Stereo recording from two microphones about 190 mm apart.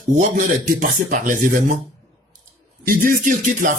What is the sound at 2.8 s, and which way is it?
Speech, 50° right (ahead or behind).